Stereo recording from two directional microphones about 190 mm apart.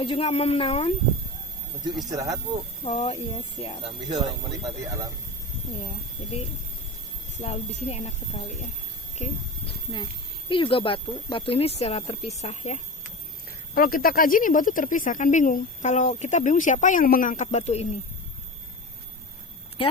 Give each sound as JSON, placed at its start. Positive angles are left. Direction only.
{"t": 0.0, "sound": "speech", "side_deg": 30}
{"t": 2.0, "sound": "speech", "side_deg": -20}
{"t": 2.8, "sound": "speech", "side_deg": 35}
{"t": 3.8, "sound": "speech", "side_deg": -25}
{"t": 7.4, "sound": "a child's voice", "side_deg": 35}
{"t": 13.7, "sound": "a woman's voice", "side_deg": 50}